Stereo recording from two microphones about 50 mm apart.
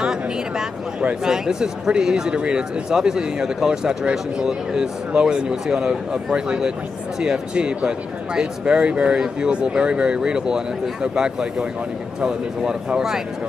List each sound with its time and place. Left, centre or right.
0.0 s speech: centre